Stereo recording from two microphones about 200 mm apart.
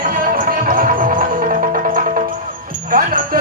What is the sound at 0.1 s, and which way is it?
Music, 45° right (ahead or behind).